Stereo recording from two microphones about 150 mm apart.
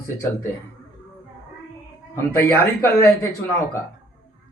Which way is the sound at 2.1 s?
15° left (ahead or behind).